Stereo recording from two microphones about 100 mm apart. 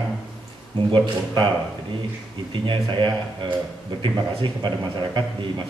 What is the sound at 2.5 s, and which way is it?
A man's voice, 50° right (ahead or behind).